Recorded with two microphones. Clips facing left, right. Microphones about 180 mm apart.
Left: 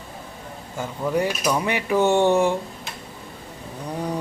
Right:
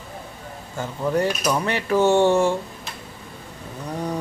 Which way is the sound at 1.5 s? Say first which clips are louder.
Even; 10° left (ahead or behind).